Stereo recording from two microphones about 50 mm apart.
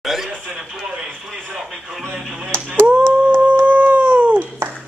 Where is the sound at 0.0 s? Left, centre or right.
Centre.